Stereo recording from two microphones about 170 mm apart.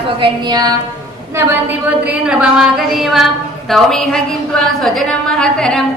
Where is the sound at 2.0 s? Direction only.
5° right (ahead or behind).